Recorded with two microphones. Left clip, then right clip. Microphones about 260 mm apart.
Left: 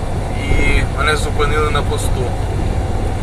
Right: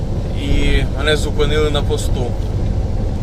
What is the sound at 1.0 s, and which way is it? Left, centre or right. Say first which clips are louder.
Speech: even; right.